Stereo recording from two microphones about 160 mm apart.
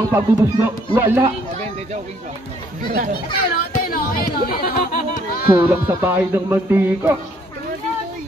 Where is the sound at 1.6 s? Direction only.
45° right (ahead or behind).